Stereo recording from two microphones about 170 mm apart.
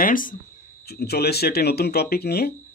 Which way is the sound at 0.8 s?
70° left (ahead or behind).